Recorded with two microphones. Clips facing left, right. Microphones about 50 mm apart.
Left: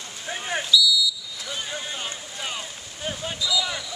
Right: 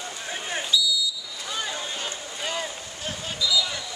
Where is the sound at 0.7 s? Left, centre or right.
Right.